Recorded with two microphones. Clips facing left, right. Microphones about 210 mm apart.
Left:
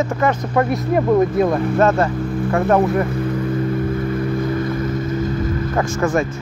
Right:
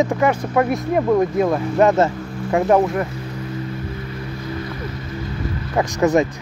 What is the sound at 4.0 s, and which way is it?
Boat, 50° left (ahead or behind).